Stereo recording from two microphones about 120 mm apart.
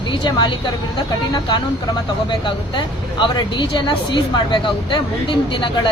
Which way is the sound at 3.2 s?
40° left (ahead or behind).